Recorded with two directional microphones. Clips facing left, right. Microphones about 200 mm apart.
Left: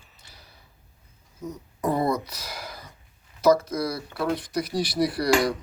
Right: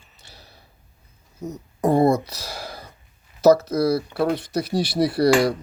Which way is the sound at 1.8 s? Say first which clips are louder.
Right 7 dB; 30° right (ahead or behind).